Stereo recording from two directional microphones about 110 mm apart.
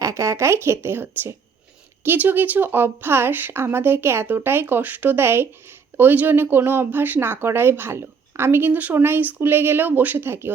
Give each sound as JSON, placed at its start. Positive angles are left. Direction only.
{"t": 0.0, "sound": "speech", "side_deg": -25}